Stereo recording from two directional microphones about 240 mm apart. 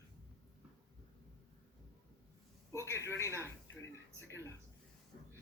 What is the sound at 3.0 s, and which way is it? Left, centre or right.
Speech, centre.